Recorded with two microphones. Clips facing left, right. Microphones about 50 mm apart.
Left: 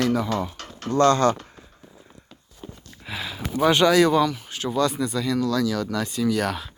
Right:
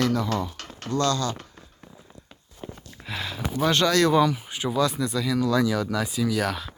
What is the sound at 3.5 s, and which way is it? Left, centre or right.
Speech, centre.